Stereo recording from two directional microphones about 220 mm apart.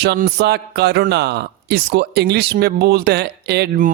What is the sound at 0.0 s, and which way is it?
A man's voice, 50° right (ahead or behind).